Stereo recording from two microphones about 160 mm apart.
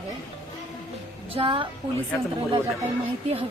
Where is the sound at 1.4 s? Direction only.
35° right (ahead or behind).